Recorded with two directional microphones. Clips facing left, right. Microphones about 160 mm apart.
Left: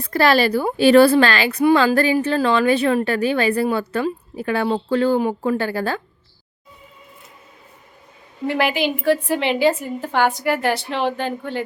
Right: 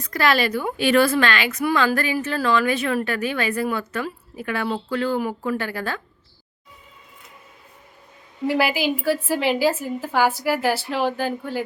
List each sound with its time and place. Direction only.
0.0 s a woman's voice: 30° left (ahead or behind)
8.4 s a woman's voice: 5° right (ahead or behind)